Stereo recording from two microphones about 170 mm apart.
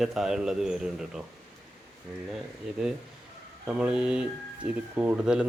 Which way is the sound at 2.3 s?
5° right (ahead or behind).